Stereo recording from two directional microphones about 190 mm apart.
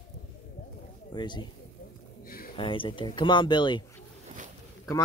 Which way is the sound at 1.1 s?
25° left (ahead or behind).